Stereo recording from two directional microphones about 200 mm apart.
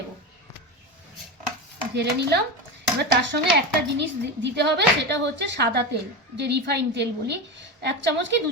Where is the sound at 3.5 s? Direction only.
60° right (ahead or behind).